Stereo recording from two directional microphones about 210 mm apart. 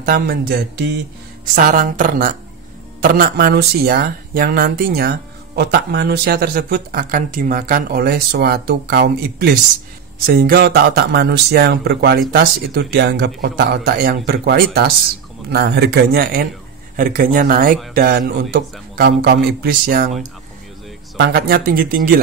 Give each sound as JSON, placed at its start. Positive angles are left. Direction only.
{"t": 0.0, "sound": "speech", "side_deg": -50}
{"t": 1.4, "sound": "a woman's voice", "side_deg": -40}
{"t": 21.2, "sound": "speech", "side_deg": -45}